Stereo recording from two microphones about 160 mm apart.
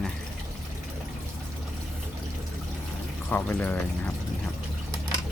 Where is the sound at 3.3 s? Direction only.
10° left (ahead or behind).